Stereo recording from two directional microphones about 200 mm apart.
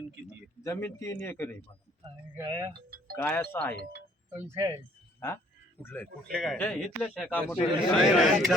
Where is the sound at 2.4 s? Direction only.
15° right (ahead or behind).